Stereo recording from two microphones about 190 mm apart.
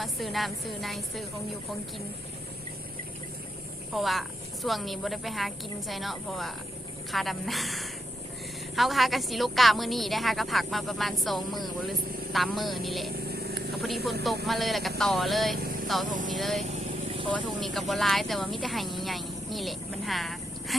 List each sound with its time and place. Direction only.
0.0 s a woman's voice: centre (ahead or behind)
3.9 s a woman's voice: centre (ahead or behind)
13.2 s vehicle: 55° right (ahead or behind)
13.8 s a woman's voice: centre (ahead or behind)
17.1 s vehicle: 25° right (ahead or behind)
17.3 s speech: centre (ahead or behind)